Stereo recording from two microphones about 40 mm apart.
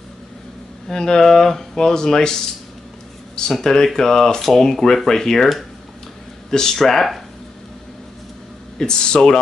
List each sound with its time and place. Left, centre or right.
0.8 s speech: centre
3.6 s speech: centre
6.5 s speech: centre
8.7 s speech: centre